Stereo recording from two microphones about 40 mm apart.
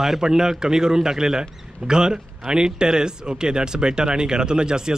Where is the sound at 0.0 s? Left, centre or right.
Centre.